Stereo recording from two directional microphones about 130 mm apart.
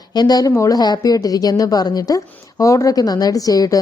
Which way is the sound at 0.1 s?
30° left (ahead or behind).